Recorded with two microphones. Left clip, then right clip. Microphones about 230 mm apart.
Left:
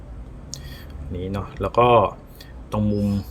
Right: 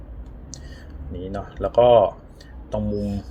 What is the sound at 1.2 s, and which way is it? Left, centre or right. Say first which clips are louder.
Speech: right 1 dB; left.